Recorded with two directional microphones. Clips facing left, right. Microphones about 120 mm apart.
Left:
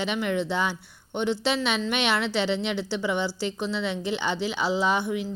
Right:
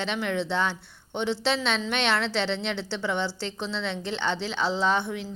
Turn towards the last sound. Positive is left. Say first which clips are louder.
# left 1 dB
turn(degrees=5)  # may be behind; listen again after turning